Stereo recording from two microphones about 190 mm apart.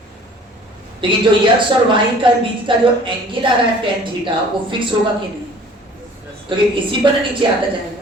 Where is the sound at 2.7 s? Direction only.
25° right (ahead or behind).